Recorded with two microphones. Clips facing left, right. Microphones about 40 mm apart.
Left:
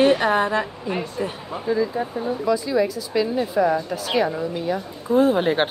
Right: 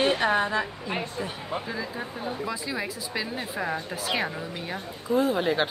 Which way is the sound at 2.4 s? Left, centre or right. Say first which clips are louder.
Left 13 dB; centre.